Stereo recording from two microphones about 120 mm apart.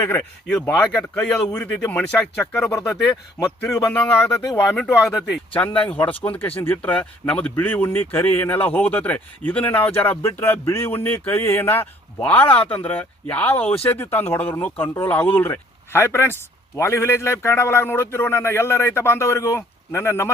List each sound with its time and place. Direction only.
0.0 s speech: 15° left (ahead or behind)
3.6 s speech: 20° left (ahead or behind)
5.0 s speech: centre (ahead or behind)
5.7 s speech: 10° left (ahead or behind)